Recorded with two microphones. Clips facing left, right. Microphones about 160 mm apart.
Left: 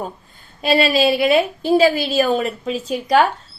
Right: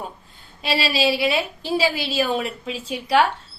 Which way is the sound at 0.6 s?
50° left (ahead or behind).